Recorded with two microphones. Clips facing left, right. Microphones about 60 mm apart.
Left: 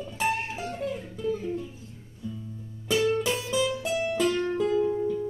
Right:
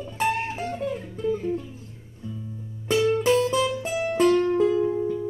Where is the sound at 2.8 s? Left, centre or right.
Right.